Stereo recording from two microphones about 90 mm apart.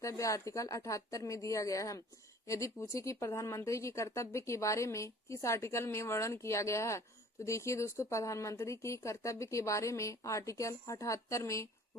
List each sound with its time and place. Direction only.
0.0 s speech: 35° left (ahead or behind)